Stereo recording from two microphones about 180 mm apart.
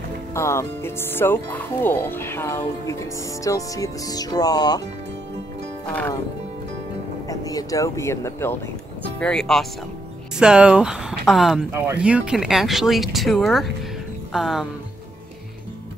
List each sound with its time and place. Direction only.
0.3 s speech: 15° left (ahead or behind)
7.2 s speech: 20° left (ahead or behind)
9.2 s speech: 5° left (ahead or behind)